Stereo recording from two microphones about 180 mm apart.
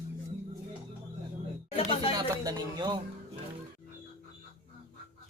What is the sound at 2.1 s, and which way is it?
Speech, 20° right (ahead or behind).